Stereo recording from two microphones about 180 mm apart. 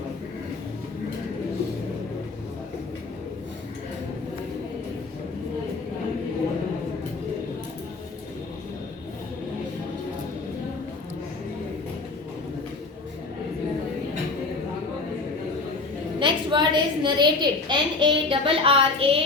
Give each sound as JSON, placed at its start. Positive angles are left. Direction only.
{"t": 16.2, "sound": "a woman's voice", "side_deg": -25}